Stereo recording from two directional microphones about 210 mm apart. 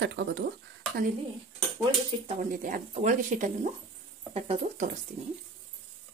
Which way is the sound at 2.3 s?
40° right (ahead or behind).